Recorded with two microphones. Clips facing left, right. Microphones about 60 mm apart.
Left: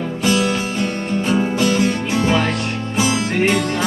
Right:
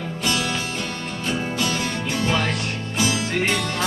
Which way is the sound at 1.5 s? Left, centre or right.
Left.